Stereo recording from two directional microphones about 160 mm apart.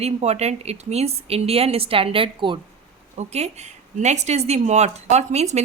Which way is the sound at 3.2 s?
45° right (ahead or behind).